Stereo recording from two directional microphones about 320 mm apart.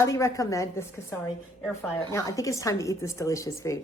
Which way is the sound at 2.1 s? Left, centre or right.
Centre.